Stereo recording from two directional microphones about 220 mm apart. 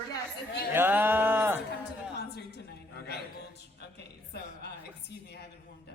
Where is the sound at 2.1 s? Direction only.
50° left (ahead or behind).